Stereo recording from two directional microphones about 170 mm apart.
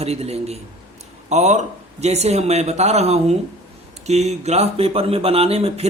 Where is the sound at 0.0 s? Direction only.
35° right (ahead or behind).